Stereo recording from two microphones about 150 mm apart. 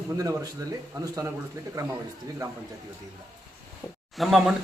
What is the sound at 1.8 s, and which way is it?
Speech, 20° right (ahead or behind).